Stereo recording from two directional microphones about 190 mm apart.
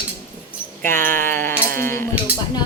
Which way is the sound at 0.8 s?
10° left (ahead or behind).